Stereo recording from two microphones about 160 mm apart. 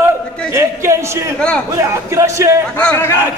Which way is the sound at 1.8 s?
20° right (ahead or behind).